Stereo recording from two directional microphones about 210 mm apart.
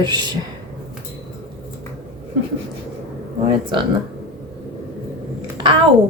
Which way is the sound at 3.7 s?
25° right (ahead or behind).